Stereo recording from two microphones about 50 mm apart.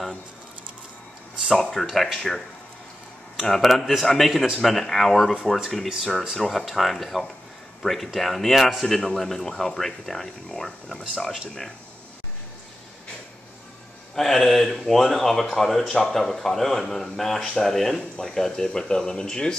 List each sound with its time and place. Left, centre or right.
1.4 s speech: centre
8.8 s speech: centre
14.1 s speech: centre